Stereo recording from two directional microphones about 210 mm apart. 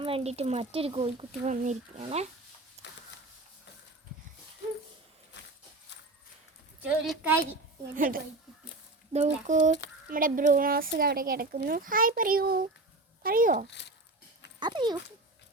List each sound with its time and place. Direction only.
0.0 s speech: 30° right (ahead or behind)
2.8 s a sound: 30° right (ahead or behind)
6.8 s a woman's voice: 5° right (ahead or behind)
7.9 s speech: 40° right (ahead or behind)
13.7 s speech: 55° left (ahead or behind)
14.6 s speech: 20° right (ahead or behind)